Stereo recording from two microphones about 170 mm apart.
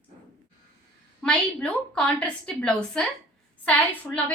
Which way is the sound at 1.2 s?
5° left (ahead or behind).